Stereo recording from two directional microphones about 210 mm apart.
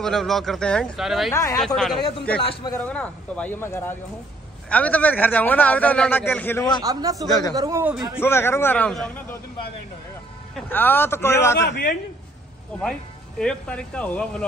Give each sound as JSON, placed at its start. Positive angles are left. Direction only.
{"t": 0.0, "sound": "speech", "side_deg": 0}
{"t": 1.3, "sound": "a man's voice", "side_deg": 15}
{"t": 2.8, "sound": "a man's voice", "side_deg": 5}
{"t": 6.8, "sound": "speech", "side_deg": -15}
{"t": 7.2, "sound": "a man's voice", "side_deg": 20}
{"t": 7.5, "sound": "speech", "side_deg": -15}
{"t": 8.2, "sound": "a man's voice", "side_deg": 10}
{"t": 10.5, "sound": "a man's voice", "side_deg": 10}
{"t": 11.6, "sound": "a man's voice", "side_deg": 55}
{"t": 13.4, "sound": "speech", "side_deg": 5}